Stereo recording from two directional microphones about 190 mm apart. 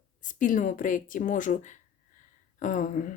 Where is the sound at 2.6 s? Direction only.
45° left (ahead or behind).